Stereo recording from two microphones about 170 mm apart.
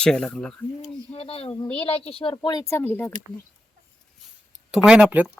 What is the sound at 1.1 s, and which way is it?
A woman's voice, 35° left (ahead or behind).